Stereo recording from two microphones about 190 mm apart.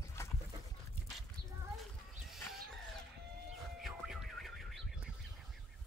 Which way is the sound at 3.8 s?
Centre (ahead or behind).